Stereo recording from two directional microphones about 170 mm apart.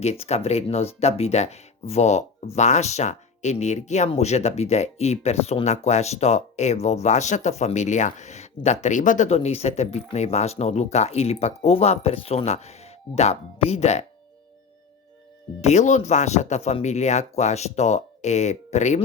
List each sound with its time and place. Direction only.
0.0 s speech: 40° left (ahead or behind)
15.6 s speech: 45° left (ahead or behind)